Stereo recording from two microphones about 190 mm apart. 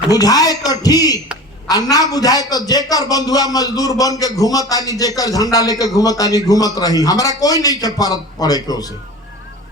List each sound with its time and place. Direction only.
0.1 s a man's voice: 20° left (ahead or behind)